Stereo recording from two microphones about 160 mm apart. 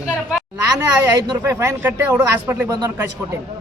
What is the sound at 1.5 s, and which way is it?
A man's voice, 15° right (ahead or behind).